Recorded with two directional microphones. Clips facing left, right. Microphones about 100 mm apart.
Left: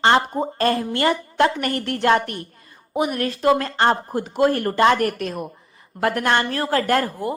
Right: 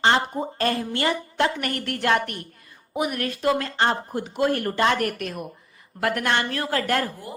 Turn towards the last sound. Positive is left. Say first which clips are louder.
# left 4 dB
turn(degrees=40)  # may be behind; listen again after turning